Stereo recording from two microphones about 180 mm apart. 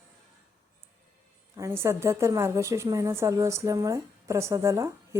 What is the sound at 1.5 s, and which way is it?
A woman's voice, 15° right (ahead or behind).